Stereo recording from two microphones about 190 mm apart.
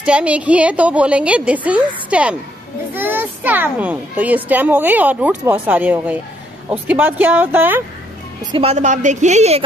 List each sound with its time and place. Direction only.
0.0 s a child's voice: 5° right (ahead or behind)
8.5 s a woman's voice: 30° right (ahead or behind)